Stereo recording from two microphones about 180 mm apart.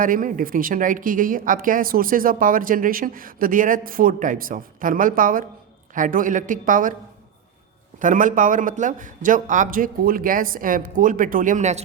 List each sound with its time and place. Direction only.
0.0 s speech: 50° right (ahead or behind)
7.9 s speech: 45° right (ahead or behind)